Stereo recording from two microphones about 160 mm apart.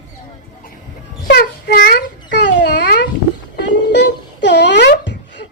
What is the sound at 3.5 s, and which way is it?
Wail, 90° left.